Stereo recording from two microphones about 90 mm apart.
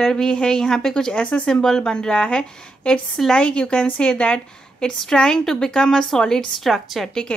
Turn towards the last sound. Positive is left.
turn(degrees=5)  # may be behind; listen again after turning